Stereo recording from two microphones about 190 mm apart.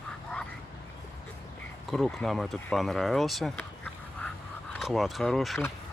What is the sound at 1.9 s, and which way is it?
Speech, centre (ahead or behind).